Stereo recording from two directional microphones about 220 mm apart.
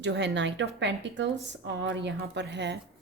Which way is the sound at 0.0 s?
55° right (ahead or behind).